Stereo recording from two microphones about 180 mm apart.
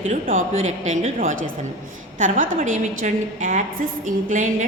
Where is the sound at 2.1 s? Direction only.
45° right (ahead or behind).